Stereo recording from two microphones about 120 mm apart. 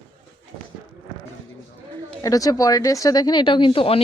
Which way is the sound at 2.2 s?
30° left (ahead or behind).